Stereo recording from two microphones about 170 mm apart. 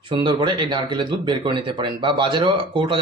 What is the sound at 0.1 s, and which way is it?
Speech, 25° right (ahead or behind).